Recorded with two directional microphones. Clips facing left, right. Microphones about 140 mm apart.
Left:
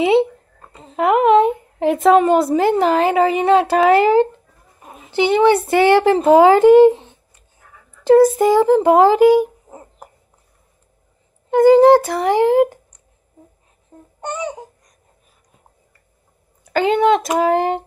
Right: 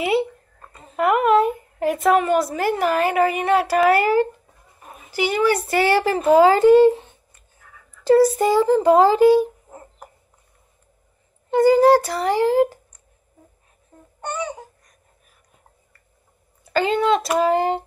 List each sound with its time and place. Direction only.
0.1 s a sound: 25° left (ahead or behind)
1.1 s speech: 90° left
1.4 s a woman's voice: 25° left (ahead or behind)
4.8 s a sound: 25° left (ahead or behind)
5.8 s a woman's voice: 20° left (ahead or behind)
8.4 s speech: 15° left (ahead or behind)
11.5 s speech: 20° left (ahead or behind)
14.2 s speech: 15° left (ahead or behind)
16.7 s speech: 15° left (ahead or behind)